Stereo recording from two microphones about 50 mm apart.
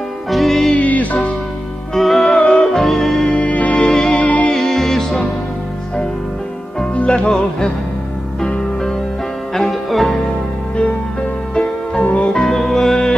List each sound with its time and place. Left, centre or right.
0.3 s music: centre
0.7 s music: left
2.0 s music: centre
2.3 s music: centre
2.7 s music: centre
3.3 s music: left
3.8 s music: centre
4.2 s music: left
4.5 s music: centre
7.1 s music: centre
9.5 s music: centre
11.5 s music: centre
12.0 s music: left
12.3 s music: centre